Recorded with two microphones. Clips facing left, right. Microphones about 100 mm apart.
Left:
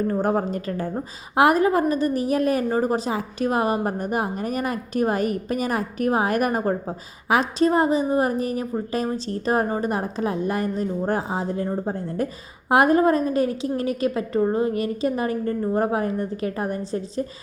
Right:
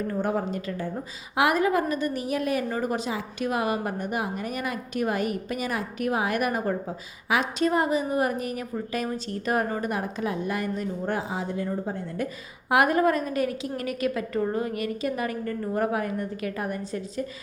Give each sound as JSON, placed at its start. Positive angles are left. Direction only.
{"t": 0.1, "sound": "a woman's voice", "side_deg": 45}